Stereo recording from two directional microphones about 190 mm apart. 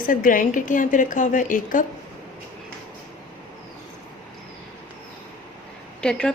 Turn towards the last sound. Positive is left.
turn(degrees=5)  # may be behind; listen again after turning